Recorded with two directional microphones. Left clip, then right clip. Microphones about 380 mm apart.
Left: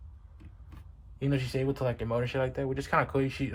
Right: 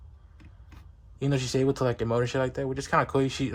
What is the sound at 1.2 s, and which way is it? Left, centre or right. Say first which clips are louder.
Speech: right 4 dB; centre.